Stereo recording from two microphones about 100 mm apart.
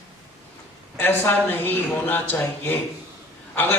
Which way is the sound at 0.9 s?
20° left (ahead or behind).